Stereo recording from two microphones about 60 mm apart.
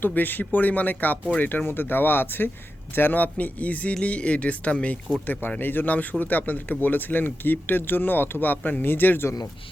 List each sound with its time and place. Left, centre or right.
0.0 s speech: left